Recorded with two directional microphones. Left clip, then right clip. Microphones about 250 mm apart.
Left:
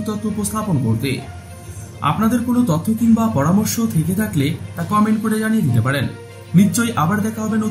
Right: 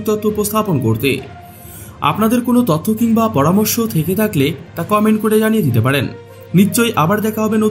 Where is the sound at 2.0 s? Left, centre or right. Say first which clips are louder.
Right 4 dB; right.